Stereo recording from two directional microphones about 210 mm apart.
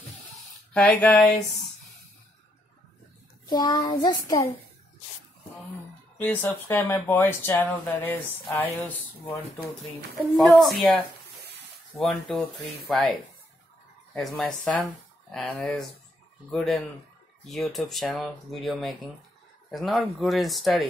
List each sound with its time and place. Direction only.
0.7 s speech: 5° left (ahead or behind)
3.4 s a child's voice: 20° left (ahead or behind)
6.1 s speech: 10° left (ahead or behind)
11.9 s speech: centre (ahead or behind)